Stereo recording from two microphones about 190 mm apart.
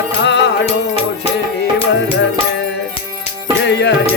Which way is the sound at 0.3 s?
65° left (ahead or behind).